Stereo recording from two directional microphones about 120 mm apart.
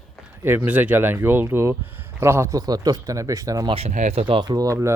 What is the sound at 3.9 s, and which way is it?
Speech, 70° right (ahead or behind).